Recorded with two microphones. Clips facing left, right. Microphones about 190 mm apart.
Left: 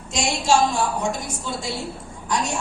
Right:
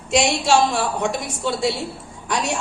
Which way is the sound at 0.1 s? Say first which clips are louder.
Right 3 dB; 70° right (ahead or behind).